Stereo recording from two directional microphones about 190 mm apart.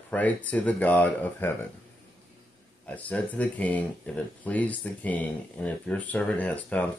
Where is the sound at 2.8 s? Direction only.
10° left (ahead or behind).